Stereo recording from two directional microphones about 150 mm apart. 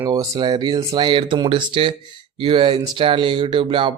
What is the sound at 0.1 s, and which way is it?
Speech, 30° right (ahead or behind).